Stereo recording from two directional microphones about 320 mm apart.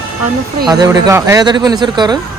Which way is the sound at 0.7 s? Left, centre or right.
Centre.